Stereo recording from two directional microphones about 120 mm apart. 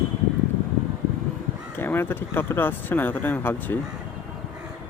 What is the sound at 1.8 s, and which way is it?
Speech, 20° left (ahead or behind).